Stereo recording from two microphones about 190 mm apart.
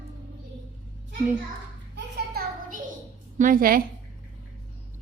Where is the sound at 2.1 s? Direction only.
55° right (ahead or behind).